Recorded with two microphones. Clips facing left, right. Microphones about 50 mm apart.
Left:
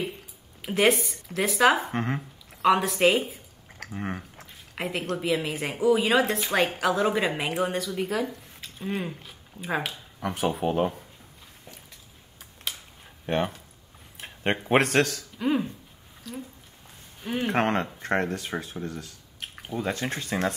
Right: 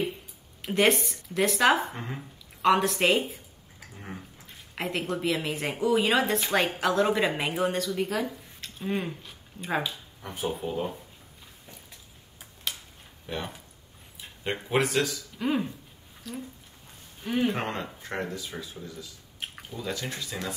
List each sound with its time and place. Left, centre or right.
0.6 s a woman's voice: centre
1.9 s speech: left
2.6 s a woman's voice: centre
3.9 s speech: left
4.7 s a woman's voice: centre
9.8 s speech: left
13.3 s speech: left
15.3 s a woman's voice: centre
17.5 s speech: left
19.7 s speech: left